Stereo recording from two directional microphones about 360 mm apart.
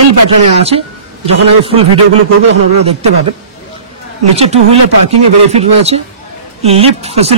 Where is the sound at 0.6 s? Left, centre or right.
Centre.